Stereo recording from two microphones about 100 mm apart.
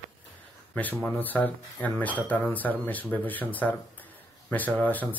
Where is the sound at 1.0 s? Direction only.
15° left (ahead or behind).